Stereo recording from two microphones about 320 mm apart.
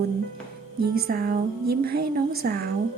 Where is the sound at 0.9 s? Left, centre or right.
Right.